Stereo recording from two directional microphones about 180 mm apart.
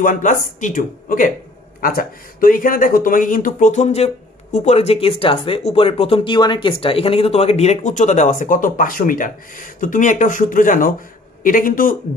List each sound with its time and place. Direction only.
0.0 s speech: 45° left (ahead or behind)